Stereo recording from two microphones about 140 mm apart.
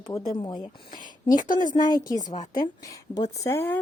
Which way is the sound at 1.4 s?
70° left (ahead or behind).